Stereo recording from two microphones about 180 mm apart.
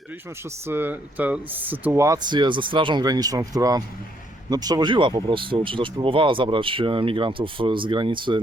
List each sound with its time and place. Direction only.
0.7 s speech: 10° right (ahead or behind); by 8.4 s 25° right (ahead or behind)